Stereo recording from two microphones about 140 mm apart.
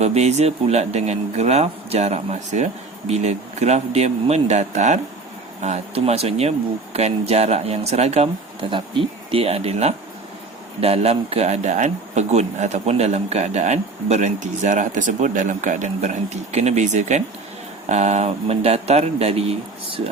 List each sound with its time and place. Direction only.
0.0 s speech: 50° right (ahead or behind)
8.7 s speech: 40° right (ahead or behind)